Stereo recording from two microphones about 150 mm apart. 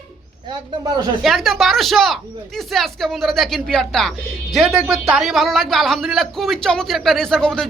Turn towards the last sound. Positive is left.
turn(degrees=5)  # may be behind; listen again after turning